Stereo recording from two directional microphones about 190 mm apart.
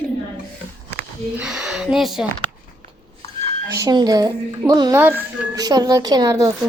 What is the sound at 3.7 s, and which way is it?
A woman's voice, 20° right (ahead or behind).